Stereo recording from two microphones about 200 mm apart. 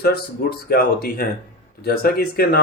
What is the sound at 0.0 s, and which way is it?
Speech, 50° left (ahead or behind).